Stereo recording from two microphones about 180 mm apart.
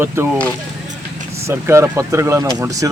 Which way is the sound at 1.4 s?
15° right (ahead or behind).